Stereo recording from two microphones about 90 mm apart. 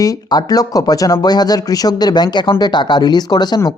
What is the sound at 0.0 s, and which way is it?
Speech, 45° left (ahead or behind).